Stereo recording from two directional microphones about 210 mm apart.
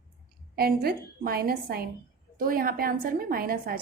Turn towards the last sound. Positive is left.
turn(degrees=-45)  # may be behind; listen again after turning